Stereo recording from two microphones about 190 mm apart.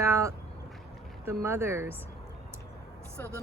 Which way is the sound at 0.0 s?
15° right (ahead or behind).